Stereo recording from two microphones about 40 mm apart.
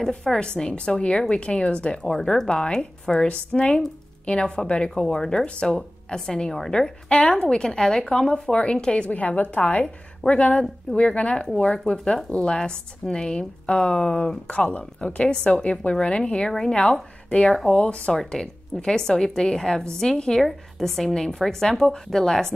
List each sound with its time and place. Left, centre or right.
0.4 s speech: left
2.1 s a woman's voice: centre
5.0 s a woman's voice: centre
7.1 s speech: left
11.4 s a woman's voice: centre
11.7 s speech: left
15.2 s a woman's voice: centre
15.5 s speech: left
18.1 s a woman's voice: centre